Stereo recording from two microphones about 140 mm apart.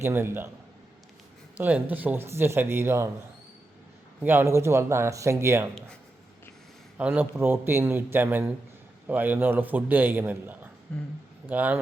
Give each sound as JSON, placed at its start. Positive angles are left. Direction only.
{"t": 0.0, "sound": "a man's voice", "side_deg": -15}
{"t": 1.5, "sound": "a man's voice", "side_deg": -10}
{"t": 4.2, "sound": "speech", "side_deg": -15}
{"t": 7.0, "sound": "a man's voice", "side_deg": -15}